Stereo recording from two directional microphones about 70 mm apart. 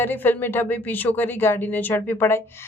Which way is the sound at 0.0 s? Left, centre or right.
Left.